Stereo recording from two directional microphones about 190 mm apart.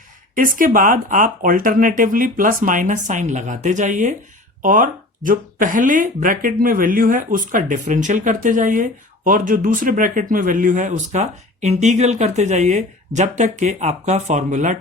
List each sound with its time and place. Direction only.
0.3 s speech: 45° right (ahead or behind)